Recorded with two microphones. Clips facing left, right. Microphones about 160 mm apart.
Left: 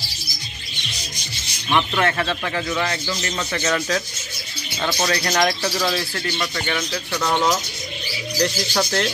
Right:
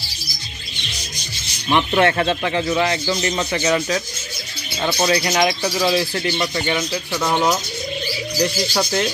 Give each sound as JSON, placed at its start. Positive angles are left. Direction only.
{"t": 1.7, "sound": "speech", "side_deg": -20}
{"t": 4.8, "sound": "speech", "side_deg": -20}
{"t": 6.1, "sound": "speech", "side_deg": -25}